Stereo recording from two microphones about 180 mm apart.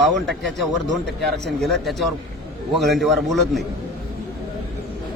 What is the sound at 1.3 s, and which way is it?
Speech, 70° right (ahead or behind).